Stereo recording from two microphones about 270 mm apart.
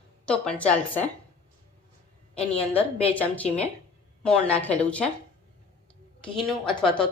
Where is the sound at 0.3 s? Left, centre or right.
Centre.